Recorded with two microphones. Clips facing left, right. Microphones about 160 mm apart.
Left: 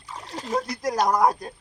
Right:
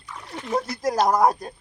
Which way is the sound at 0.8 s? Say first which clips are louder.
Right 2 dB; 25° right (ahead or behind).